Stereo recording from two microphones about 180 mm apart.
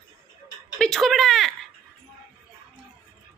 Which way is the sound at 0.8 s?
Centre (ahead or behind).